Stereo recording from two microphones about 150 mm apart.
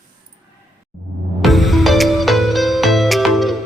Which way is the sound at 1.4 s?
Centre (ahead or behind).